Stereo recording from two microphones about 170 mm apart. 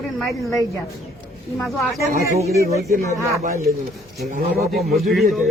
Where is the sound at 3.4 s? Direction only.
60° right (ahead or behind).